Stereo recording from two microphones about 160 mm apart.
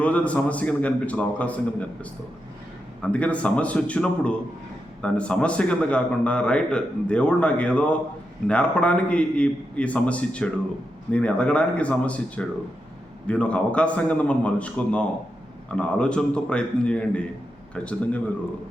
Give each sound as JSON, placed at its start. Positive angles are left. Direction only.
{"t": 0.0, "sound": "a man's voice", "side_deg": 10}
{"t": 3.0, "sound": "a man's voice", "side_deg": 10}